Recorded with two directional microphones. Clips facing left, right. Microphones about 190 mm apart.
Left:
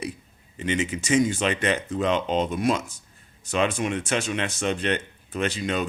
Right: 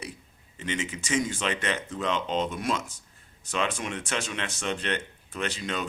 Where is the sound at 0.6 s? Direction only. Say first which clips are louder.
Left 6 dB; 15° left (ahead or behind).